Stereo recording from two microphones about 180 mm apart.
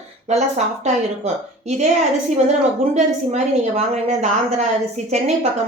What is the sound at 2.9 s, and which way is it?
A woman's voice, 40° right (ahead or behind).